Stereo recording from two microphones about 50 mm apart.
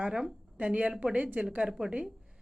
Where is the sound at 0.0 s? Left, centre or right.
Centre.